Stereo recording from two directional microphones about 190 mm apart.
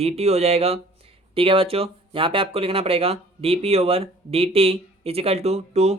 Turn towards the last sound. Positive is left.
turn(degrees=-35)  # may be behind; listen again after turning